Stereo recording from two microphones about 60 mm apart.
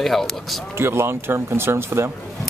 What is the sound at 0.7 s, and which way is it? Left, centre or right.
Speech, right.